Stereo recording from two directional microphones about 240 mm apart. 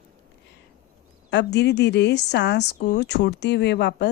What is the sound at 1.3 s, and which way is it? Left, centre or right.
Speech, left.